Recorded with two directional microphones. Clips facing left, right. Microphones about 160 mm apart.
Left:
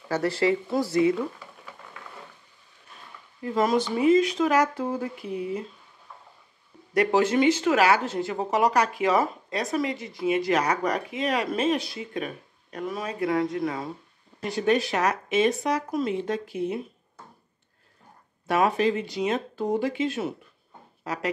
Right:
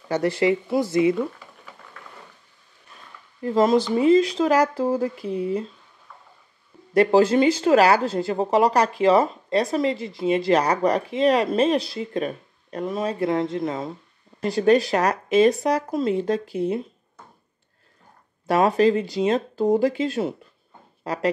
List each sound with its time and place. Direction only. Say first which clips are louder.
0.1 s speech: right 3 dB; 20° right (ahead or behind)
3.4 s speech: right 5 dB; 30° right (ahead or behind)
6.9 s speech: right 5 dB; 30° right (ahead or behind)
14.4 s speech: right 6 dB; 35° right (ahead or behind)
18.5 s speech: right 5 dB; 35° right (ahead or behind)